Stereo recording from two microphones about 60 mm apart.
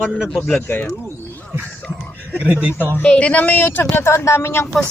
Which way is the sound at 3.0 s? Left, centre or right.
Left.